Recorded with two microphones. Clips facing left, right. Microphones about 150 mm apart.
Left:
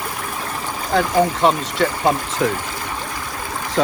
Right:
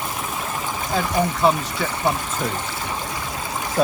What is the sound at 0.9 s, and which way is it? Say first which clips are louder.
Speech: left 5 dB; 80° left.